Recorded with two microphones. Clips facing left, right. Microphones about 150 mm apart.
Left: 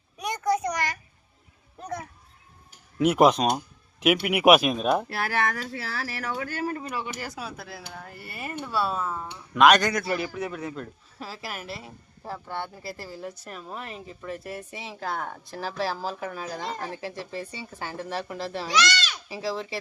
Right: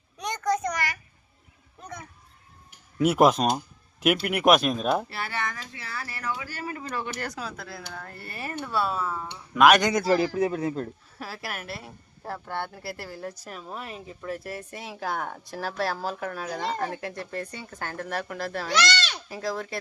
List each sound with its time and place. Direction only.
0.2 s a sound: 5° left (ahead or behind)
1.8 s a sound: 35° left (ahead or behind)
3.0 s speech: 5° right (ahead or behind)
5.0 s speech: 65° left (ahead or behind); by 6.3 s 85° left
6.4 s speech: 50° left (ahead or behind)
6.9 s speech: 10° left (ahead or behind)
10.0 s speech: 35° right (ahead or behind)
11.3 s speech: centre (ahead or behind)
12.8 s speech: 65° right (ahead or behind)
13.5 s speech: centre (ahead or behind)